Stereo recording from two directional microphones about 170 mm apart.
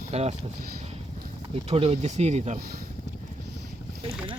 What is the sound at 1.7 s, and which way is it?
Speech, 40° right (ahead or behind).